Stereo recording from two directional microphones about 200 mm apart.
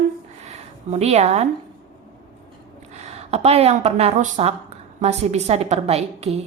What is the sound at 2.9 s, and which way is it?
A woman's voice, 35° right (ahead or behind).